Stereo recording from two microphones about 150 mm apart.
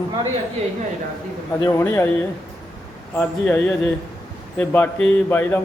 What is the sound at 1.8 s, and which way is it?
Speech, 15° left (ahead or behind).